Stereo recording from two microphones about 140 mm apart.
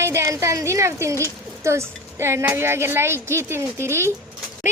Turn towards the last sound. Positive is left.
turn(degrees=-20)  # may be behind; listen again after turning